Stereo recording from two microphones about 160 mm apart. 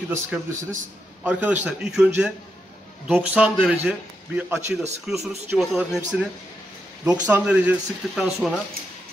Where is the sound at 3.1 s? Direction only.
5° right (ahead or behind).